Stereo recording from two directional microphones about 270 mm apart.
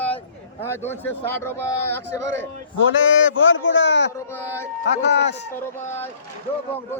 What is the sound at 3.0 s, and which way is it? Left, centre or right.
A man's voice, left.